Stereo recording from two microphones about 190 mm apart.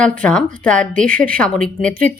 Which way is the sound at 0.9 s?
45° right (ahead or behind).